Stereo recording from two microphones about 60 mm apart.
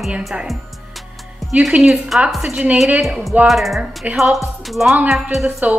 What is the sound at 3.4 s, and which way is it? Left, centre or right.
Speech, centre.